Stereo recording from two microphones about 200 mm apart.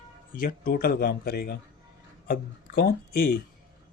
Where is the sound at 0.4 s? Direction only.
45° left (ahead or behind).